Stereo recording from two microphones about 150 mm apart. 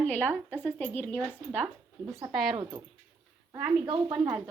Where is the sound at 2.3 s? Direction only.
Centre (ahead or behind).